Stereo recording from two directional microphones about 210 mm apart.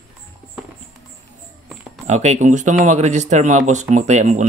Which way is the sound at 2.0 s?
35° right (ahead or behind).